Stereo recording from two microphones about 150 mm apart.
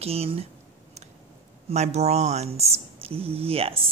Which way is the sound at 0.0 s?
40° right (ahead or behind).